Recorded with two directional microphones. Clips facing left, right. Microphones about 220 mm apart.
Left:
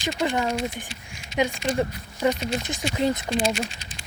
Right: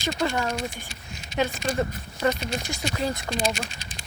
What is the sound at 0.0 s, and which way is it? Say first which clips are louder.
Speech: left 1 dB; 15° left (ahead or behind).